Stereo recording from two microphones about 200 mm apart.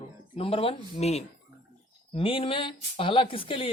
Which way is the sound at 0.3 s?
30° left (ahead or behind).